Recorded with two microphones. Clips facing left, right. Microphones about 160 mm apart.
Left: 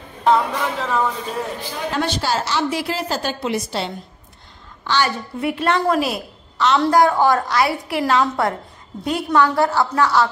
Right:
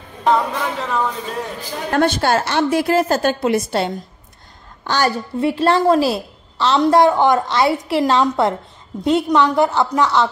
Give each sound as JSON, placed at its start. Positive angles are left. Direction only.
{"t": 0.2, "sound": "speech", "side_deg": 0}
{"t": 1.9, "sound": "a woman's voice", "side_deg": -55}
{"t": 5.4, "sound": "a woman's voice", "side_deg": -30}